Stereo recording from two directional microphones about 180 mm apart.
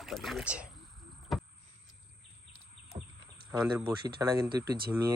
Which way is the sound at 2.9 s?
35° right (ahead or behind).